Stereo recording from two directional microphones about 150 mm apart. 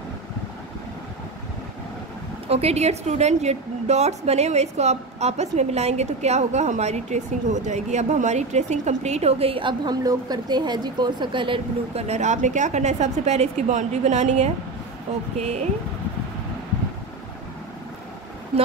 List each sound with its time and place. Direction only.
2.4 s a woman's voice: 45° right (ahead or behind)
12.1 s a woman's voice: 50° right (ahead or behind)